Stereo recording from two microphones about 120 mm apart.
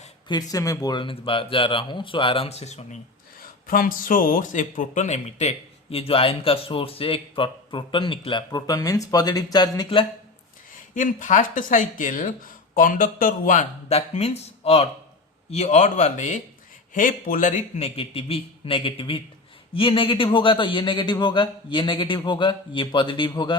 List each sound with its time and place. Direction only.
0.3 s speech: 35° left (ahead or behind); by 3.0 s 65° left (ahead or behind)
4.5 s speech: 90° left; by 10.1 s 40° left (ahead or behind)
10.9 s speech: 90° left
13.5 s a man's voice: 75° left (ahead or behind); by 23.6 s 40° left (ahead or behind)